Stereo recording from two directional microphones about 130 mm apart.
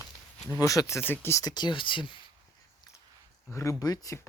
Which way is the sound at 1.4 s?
35° left (ahead or behind).